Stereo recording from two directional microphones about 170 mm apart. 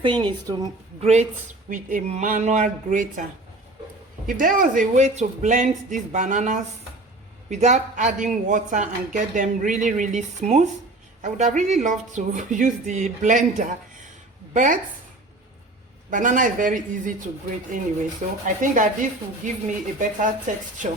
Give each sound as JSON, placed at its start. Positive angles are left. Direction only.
{"t": 0.0, "sound": "a woman's voice", "side_deg": -30}
{"t": 0.9, "sound": "speech", "side_deg": -40}
{"t": 1.7, "sound": "speech", "side_deg": -50}
{"t": 4.3, "sound": "speech", "side_deg": -55}
{"t": 16.0, "sound": "speech", "side_deg": -50}
{"t": 18.4, "sound": "speech", "side_deg": -50}